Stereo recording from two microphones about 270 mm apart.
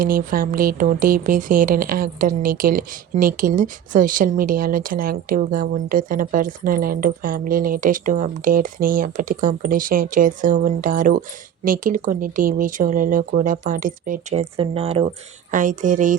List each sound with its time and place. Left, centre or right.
0.0 s speech: right